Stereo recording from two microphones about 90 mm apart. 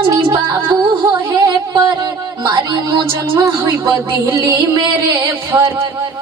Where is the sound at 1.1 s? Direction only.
40° right (ahead or behind).